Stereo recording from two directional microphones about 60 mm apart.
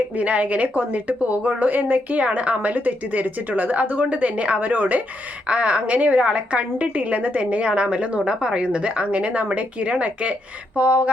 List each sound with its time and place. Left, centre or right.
0.2 s a woman's voice: right